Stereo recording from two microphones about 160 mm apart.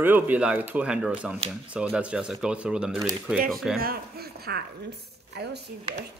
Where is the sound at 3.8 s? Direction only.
75° right (ahead or behind).